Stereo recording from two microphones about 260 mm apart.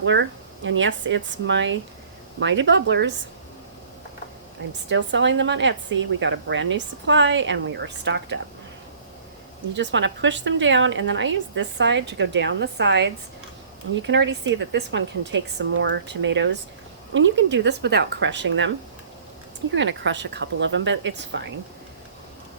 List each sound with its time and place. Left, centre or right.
0.0 s speech: right
4.9 s speech: right
9.7 s speech: right
19.7 s speech: right